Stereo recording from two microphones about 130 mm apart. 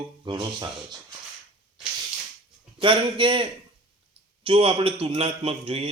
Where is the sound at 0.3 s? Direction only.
35° right (ahead or behind).